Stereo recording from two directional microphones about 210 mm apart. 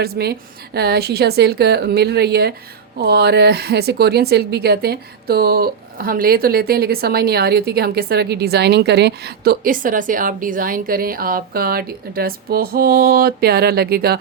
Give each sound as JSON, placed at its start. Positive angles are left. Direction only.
{"t": 0.0, "sound": "speech", "side_deg": -50}